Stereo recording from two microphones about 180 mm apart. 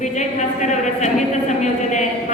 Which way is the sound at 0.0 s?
40° left (ahead or behind).